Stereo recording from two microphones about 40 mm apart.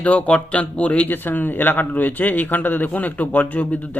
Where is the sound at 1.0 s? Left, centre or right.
Left.